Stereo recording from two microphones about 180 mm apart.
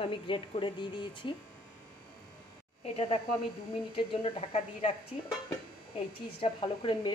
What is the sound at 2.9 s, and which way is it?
A woman's voice, 30° left (ahead or behind).